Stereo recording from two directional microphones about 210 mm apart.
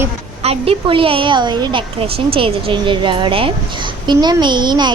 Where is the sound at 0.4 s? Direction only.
30° right (ahead or behind).